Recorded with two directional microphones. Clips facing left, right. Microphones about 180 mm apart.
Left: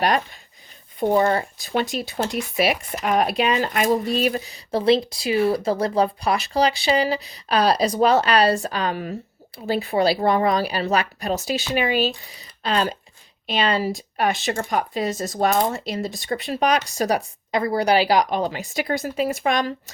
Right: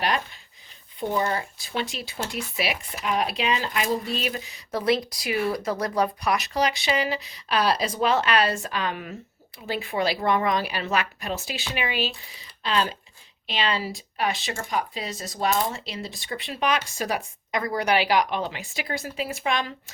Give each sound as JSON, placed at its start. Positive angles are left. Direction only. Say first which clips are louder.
{"t": 0.9, "sound": "speech", "louder": "left 7 dB", "side_deg": 45}